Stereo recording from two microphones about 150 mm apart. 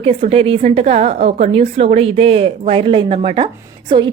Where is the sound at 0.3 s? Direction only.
40° right (ahead or behind).